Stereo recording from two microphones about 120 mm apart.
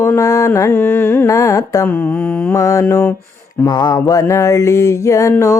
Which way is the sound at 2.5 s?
25° left (ahead or behind).